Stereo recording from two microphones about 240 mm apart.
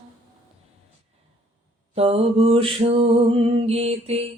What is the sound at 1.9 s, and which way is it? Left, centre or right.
Music, right.